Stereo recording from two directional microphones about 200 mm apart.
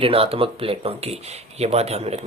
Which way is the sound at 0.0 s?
30° right (ahead or behind).